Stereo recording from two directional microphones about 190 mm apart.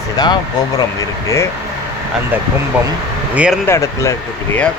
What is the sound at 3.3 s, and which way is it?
Speech, 5° right (ahead or behind).